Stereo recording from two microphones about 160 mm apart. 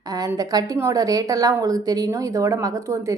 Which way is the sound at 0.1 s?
25° right (ahead or behind).